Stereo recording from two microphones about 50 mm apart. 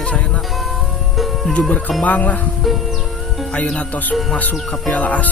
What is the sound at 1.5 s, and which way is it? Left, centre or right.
Speech, left.